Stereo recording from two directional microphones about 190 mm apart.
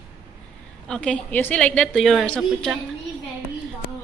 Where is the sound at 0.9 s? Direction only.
5° left (ahead or behind).